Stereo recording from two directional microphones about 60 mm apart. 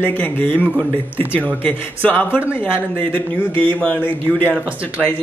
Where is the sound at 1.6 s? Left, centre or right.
Left.